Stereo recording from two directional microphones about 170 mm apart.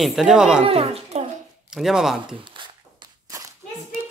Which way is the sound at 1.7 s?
5° right (ahead or behind).